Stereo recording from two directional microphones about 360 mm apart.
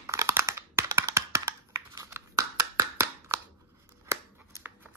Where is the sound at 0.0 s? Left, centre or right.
Centre.